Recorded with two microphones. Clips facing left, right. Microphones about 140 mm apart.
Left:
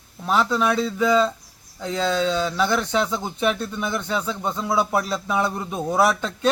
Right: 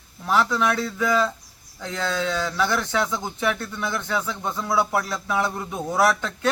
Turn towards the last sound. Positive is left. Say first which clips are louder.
# left 1 dB
turn(degrees=20)  # may be behind; listen again after turning